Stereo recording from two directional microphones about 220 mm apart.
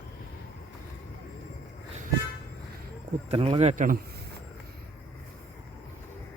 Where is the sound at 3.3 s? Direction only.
30° right (ahead or behind).